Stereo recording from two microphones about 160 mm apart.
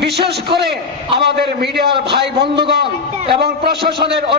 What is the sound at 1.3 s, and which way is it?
A man's voice, 90° right.